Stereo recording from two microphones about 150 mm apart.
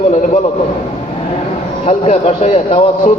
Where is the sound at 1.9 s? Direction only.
45° left (ahead or behind).